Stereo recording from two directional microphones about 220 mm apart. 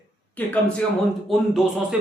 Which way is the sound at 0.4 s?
5° left (ahead or behind).